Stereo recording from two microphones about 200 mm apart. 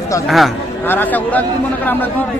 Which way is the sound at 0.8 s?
10° left (ahead or behind).